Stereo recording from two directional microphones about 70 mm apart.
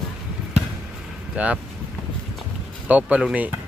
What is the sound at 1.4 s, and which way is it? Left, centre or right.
Speech, centre.